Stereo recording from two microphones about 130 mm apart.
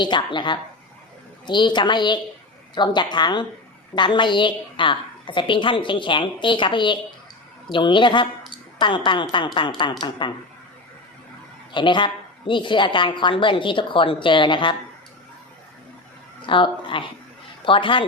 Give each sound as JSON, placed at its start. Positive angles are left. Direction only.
{"t": 0.0, "sound": "a woman's voice", "side_deg": 35}
{"t": 11.7, "sound": "a woman's voice", "side_deg": 40}
{"t": 16.5, "sound": "a woman's voice", "side_deg": 40}